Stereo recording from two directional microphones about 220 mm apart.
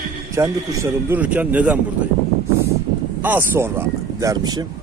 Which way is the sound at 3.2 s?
10° right (ahead or behind).